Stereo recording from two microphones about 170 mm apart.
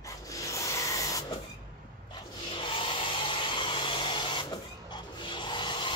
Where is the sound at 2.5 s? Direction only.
30° left (ahead or behind).